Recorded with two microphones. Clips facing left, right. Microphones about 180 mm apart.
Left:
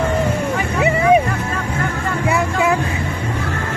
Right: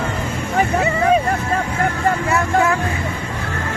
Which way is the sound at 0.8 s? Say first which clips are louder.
Left 5 dB; 15° left (ahead or behind).